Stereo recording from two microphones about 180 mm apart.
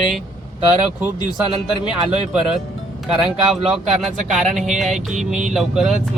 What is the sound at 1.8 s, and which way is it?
Speech, 25° left (ahead or behind).